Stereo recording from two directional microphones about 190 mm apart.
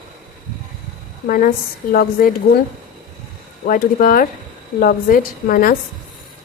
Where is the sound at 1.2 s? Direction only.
45° left (ahead or behind).